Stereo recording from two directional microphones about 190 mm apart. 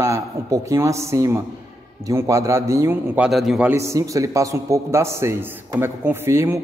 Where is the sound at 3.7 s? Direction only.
15° right (ahead or behind).